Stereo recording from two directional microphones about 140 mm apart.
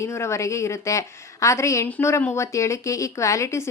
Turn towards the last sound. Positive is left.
turn(degrees=20)  # may be behind; listen again after turning